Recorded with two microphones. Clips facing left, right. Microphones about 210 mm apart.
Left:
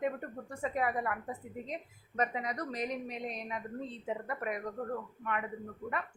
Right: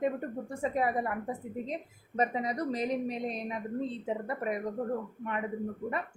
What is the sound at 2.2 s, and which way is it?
A woman's voice, 30° right (ahead or behind).